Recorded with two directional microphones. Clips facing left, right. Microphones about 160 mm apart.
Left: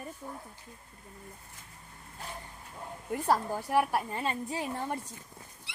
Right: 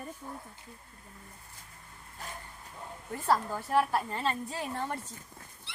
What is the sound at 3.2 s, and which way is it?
A woman's voice, 15° left (ahead or behind).